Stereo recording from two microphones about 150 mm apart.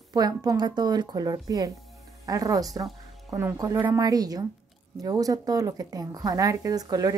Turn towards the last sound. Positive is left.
turn(degrees=-25)  # may be behind; listen again after turning